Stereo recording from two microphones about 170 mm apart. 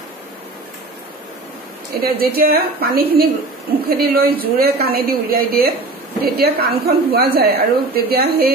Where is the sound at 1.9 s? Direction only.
65° right (ahead or behind).